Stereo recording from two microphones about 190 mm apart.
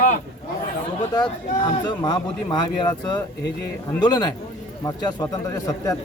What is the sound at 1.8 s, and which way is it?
A man's voice, 25° left (ahead or behind).